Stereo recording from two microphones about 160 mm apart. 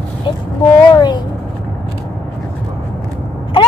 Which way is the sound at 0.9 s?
25° left (ahead or behind).